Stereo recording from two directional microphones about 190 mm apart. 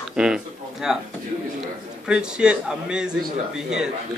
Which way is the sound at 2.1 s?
5° right (ahead or behind).